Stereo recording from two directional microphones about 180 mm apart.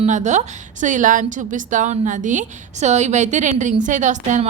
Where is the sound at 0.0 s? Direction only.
40° right (ahead or behind).